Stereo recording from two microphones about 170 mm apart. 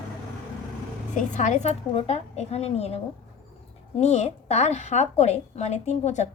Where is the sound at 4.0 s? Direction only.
40° left (ahead or behind).